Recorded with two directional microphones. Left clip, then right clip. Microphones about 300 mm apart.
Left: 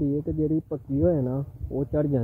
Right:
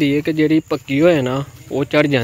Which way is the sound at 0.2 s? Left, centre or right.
Right.